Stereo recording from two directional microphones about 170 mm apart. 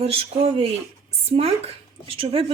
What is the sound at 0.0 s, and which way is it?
Speech, 35° right (ahead or behind).